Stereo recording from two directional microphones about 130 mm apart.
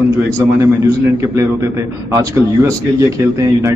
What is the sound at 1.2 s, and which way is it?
A man's voice, 25° right (ahead or behind).